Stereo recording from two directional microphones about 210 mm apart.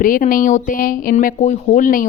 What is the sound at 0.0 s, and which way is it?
Speech, 40° left (ahead or behind).